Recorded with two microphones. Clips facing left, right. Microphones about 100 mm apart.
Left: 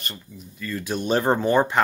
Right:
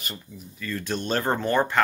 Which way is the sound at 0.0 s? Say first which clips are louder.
Left 1 dB; centre (ahead or behind).